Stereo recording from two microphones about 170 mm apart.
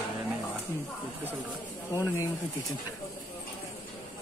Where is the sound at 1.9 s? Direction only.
15° left (ahead or behind).